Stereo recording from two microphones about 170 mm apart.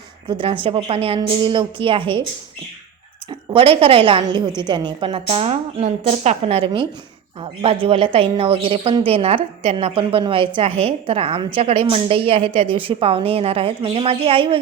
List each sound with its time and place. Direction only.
0.3 s a woman's voice: 30° right (ahead or behind)
3.2 s a woman's voice: 30° right (ahead or behind)